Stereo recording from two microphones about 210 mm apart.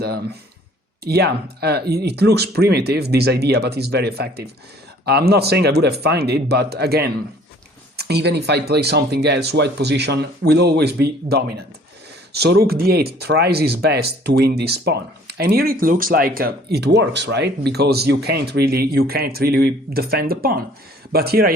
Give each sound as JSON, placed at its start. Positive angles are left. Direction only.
{"t": 1.0, "sound": "speech", "side_deg": -50}